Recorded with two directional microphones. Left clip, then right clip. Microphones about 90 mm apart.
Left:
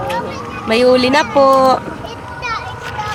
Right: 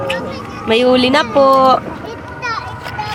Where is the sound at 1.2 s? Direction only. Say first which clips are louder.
Even; 20° left (ahead or behind).